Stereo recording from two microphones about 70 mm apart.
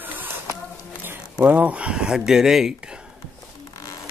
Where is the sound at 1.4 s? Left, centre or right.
Right.